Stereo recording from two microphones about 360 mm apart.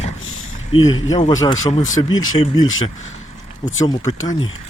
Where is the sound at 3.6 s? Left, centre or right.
Centre.